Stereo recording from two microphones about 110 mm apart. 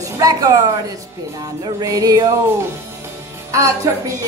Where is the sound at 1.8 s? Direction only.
30° right (ahead or behind).